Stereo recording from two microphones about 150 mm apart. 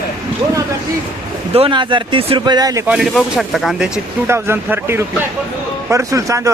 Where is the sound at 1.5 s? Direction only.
35° right (ahead or behind).